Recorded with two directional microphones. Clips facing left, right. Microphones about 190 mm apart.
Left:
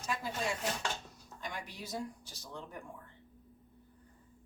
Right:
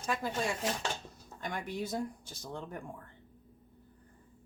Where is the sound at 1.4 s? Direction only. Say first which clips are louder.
Right 7 dB; 55° right (ahead or behind).